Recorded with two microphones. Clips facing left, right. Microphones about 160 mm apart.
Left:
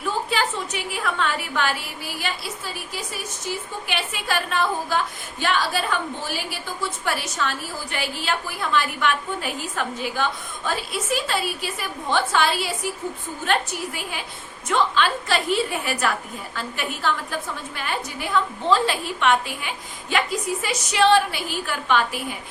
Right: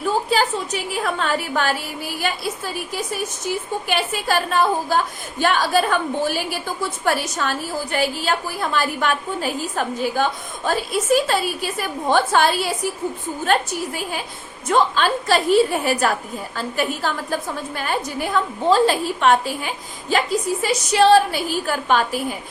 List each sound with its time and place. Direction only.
0.3 s a woman's voice: 35° right (ahead or behind)
3.8 s a woman's voice: 40° right (ahead or behind)